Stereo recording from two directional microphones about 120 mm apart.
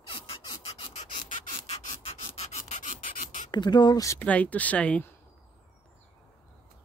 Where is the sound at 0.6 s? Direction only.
55° left (ahead or behind); by 1.7 s 80° left.